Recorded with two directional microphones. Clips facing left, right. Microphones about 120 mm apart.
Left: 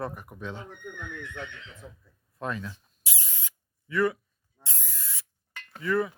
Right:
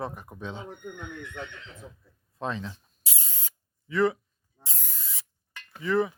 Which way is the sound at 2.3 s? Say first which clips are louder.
Right 1 dB; 25° right (ahead or behind).